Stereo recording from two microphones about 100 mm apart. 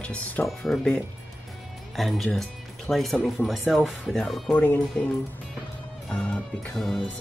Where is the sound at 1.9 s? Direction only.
Centre (ahead or behind).